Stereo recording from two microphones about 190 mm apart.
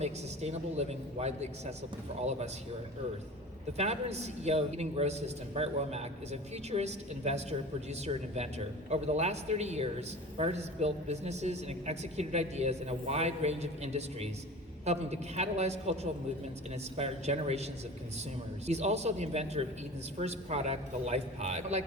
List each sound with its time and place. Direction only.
0.0 s a woman's voice: 35° right (ahead or behind)
3.7 s a woman's voice: 35° right (ahead or behind)
17.0 s a woman's voice: 35° right (ahead or behind)